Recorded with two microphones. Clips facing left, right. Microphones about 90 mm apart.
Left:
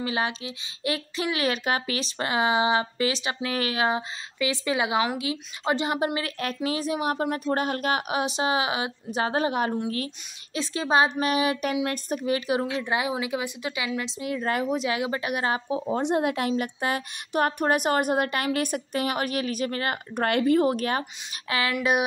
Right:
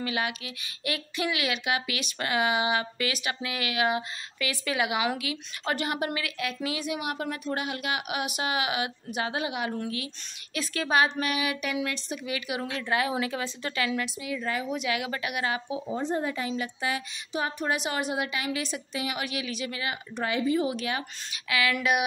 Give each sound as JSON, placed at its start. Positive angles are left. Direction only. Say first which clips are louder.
{"t": 0.0, "sound": "a woman's voice", "louder": "left 3 dB", "side_deg": 30}
{"t": 10.5, "sound": "a woman's voice", "louder": "left 3 dB", "side_deg": 25}
{"t": 14.2, "sound": "a woman's voice", "louder": "left 4 dB", "side_deg": 50}
{"t": 14.8, "sound": "a woman's voice", "louder": "left 3 dB", "side_deg": 30}
{"t": 15.9, "sound": "a woman's voice", "louder": "left 5 dB", "side_deg": 70}
{"t": 21.5, "sound": "a woman's voice", "louder": "even", "side_deg": 35}